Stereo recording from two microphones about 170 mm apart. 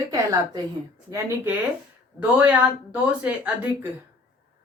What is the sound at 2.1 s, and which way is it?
Speech, 10° right (ahead or behind).